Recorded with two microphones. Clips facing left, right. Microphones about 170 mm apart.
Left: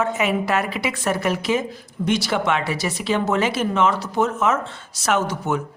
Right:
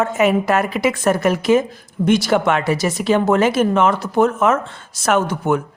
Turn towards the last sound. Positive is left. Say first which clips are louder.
# right 4 dB
turn(degrees=-55)  # may be behind; listen again after turning